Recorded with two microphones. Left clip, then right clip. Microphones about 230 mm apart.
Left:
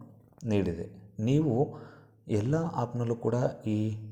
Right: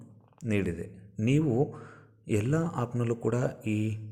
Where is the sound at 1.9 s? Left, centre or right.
Right.